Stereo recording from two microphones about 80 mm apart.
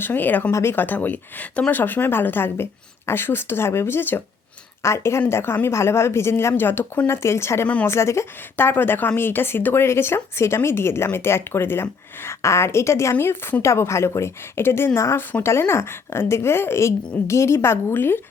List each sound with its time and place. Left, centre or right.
0.0 s a woman's voice: left